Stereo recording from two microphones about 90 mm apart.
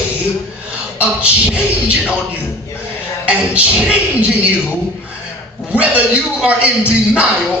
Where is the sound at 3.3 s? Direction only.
15° right (ahead or behind).